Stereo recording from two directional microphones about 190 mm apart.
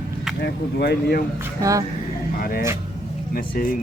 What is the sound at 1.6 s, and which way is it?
Speech, 15° right (ahead or behind).